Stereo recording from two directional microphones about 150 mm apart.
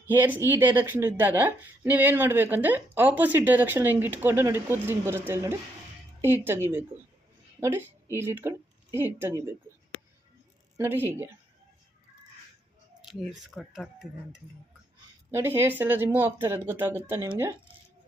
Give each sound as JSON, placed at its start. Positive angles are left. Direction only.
{"t": 0.1, "sound": "speech", "side_deg": -15}
{"t": 10.8, "sound": "speech", "side_deg": -15}
{"t": 13.5, "sound": "speech", "side_deg": 0}
{"t": 15.3, "sound": "speech", "side_deg": -15}